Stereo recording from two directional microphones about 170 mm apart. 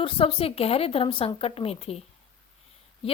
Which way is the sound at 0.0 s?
35° left (ahead or behind).